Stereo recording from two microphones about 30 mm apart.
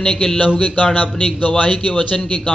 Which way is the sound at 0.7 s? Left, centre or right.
Left.